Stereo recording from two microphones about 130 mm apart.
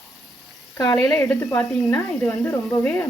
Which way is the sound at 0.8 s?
25° left (ahead or behind).